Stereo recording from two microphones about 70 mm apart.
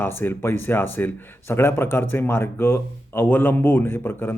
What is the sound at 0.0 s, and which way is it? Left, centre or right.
A man's voice, left.